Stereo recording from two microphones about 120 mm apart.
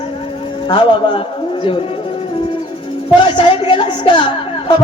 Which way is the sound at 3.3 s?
50° left (ahead or behind).